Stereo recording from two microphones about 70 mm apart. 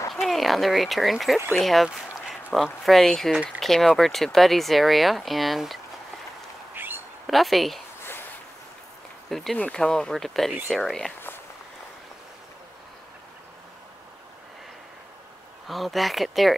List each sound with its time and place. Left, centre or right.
0.1 s speech: centre
6.7 s bird: right
7.2 s speech: centre
8.0 s a sound: left
9.3 s speech: centre
11.1 s a sound: left
15.6 s speech: centre